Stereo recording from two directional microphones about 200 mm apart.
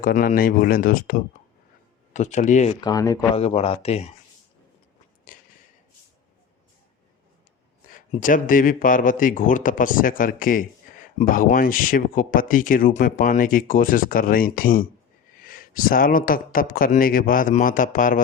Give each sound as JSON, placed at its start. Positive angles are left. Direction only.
{"t": 0.0, "sound": "speech", "side_deg": 45}
{"t": 2.8, "sound": "speech", "side_deg": 20}
{"t": 3.3, "sound": "speech", "side_deg": 30}
{"t": 5.3, "sound": "a sound", "side_deg": 45}
{"t": 7.9, "sound": "speech", "side_deg": 40}